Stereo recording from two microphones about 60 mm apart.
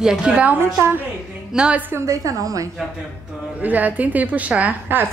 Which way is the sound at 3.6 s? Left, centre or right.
Right.